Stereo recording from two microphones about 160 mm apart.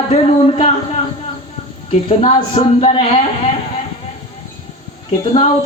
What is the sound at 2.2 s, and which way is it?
Speech, 40° left (ahead or behind).